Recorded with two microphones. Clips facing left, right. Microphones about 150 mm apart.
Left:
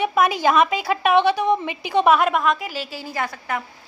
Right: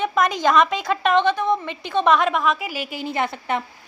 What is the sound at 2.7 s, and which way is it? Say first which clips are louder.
Speech: right 3 dB; 15° right (ahead or behind).